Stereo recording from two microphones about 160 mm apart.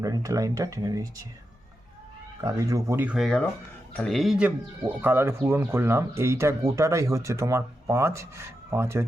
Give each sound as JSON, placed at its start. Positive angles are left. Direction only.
{"t": 0.0, "sound": "speech", "side_deg": -20}
{"t": 2.4, "sound": "speech", "side_deg": -20}